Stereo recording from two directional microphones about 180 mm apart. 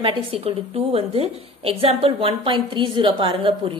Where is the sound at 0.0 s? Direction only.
30° right (ahead or behind).